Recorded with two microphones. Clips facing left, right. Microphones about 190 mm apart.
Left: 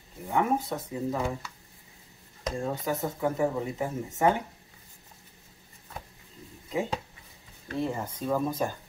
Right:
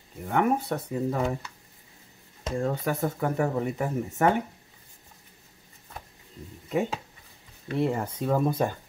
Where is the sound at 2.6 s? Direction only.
60° right (ahead or behind).